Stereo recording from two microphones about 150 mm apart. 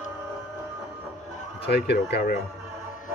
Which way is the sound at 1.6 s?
90° left.